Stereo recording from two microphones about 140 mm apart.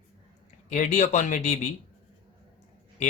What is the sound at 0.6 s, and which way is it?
Speech, 60° left (ahead or behind).